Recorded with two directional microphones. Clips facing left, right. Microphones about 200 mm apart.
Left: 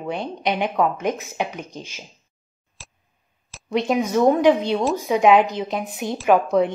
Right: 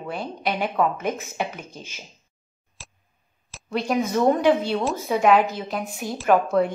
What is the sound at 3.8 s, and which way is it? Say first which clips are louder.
Speech: left 3 dB; 5° left (ahead or behind).